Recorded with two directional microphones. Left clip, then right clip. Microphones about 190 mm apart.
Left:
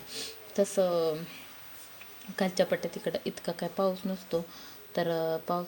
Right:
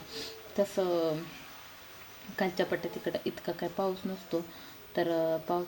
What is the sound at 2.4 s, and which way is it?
Speech, 25° left (ahead or behind).